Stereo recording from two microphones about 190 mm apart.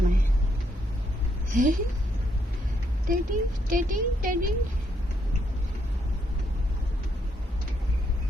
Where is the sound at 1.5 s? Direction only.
45° right (ahead or behind).